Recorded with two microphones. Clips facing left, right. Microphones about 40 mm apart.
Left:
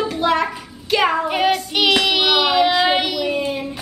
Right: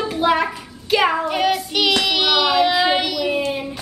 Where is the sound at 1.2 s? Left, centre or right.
Centre.